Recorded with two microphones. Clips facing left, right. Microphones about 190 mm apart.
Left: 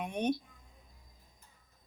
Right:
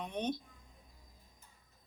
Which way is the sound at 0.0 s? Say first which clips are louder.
Left 4 dB; 10° left (ahead or behind).